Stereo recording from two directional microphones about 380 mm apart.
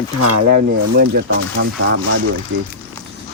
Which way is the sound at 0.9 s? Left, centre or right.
Right.